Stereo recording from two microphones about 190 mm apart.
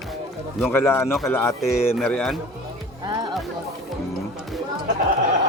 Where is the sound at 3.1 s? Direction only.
20° right (ahead or behind).